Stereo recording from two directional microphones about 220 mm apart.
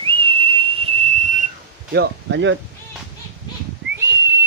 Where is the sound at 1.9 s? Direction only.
50° right (ahead or behind).